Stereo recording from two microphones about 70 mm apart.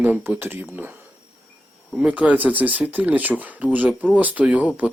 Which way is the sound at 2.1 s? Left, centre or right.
Centre.